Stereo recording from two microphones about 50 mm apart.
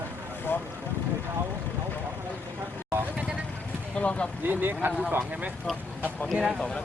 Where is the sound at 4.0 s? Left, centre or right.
Left.